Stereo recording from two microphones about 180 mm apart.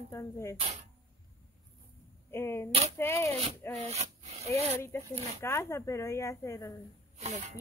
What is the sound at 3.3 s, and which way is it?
Speech, 35° right (ahead or behind).